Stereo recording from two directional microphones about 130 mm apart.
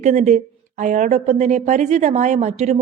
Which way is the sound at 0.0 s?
65° right (ahead or behind).